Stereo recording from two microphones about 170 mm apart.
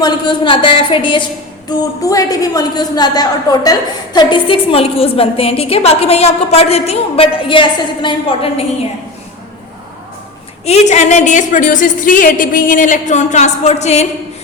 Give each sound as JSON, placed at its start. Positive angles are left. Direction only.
{"t": 0.0, "sound": "a woman's voice", "side_deg": 30}
{"t": 10.7, "sound": "a woman's voice", "side_deg": 40}